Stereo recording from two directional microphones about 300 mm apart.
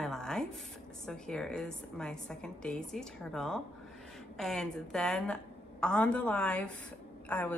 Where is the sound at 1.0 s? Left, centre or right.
Centre.